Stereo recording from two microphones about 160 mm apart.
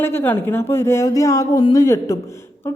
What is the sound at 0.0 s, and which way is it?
Speech, 15° left (ahead or behind).